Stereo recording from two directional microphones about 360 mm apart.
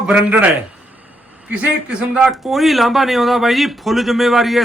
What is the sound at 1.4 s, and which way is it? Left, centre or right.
A man's voice, centre.